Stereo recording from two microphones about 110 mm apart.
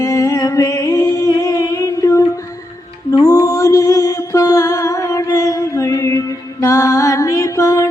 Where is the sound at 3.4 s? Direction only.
25° left (ahead or behind).